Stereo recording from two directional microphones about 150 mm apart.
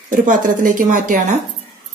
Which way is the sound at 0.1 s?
60° right (ahead or behind).